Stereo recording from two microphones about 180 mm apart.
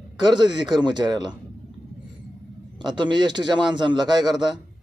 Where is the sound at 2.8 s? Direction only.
25° right (ahead or behind).